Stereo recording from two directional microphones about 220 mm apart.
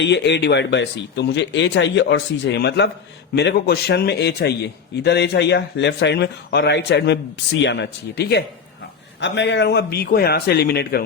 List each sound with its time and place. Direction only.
0.0 s a man's voice: 50° left (ahead or behind)